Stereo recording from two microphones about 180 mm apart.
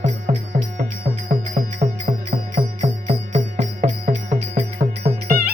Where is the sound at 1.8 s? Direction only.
45° right (ahead or behind).